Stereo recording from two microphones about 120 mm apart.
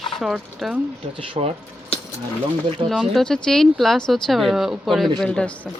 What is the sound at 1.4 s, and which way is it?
Speech, 50° right (ahead or behind).